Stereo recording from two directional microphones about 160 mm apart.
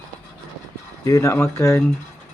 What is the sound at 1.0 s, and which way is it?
Speech, 20° left (ahead or behind).